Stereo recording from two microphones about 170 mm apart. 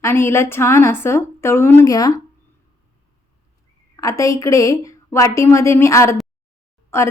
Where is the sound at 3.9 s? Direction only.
20° left (ahead or behind).